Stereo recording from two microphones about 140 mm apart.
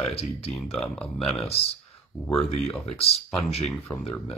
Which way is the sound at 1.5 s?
45° left (ahead or behind).